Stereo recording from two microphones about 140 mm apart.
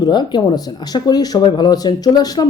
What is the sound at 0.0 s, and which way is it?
Speech, 30° left (ahead or behind).